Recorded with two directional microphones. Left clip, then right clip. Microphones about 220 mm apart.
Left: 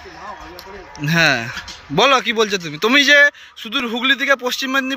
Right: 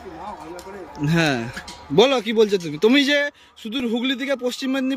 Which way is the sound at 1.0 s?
10° right (ahead or behind).